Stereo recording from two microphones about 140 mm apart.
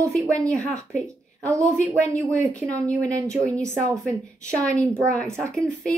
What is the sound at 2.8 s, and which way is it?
Speech, 10° left (ahead or behind).